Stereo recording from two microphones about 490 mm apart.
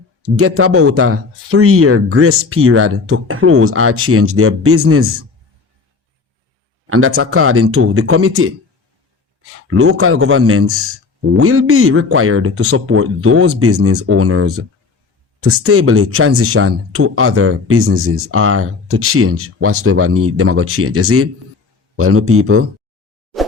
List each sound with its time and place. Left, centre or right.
0.3 s speech: right
6.8 s a man's voice: right
9.6 s speech: right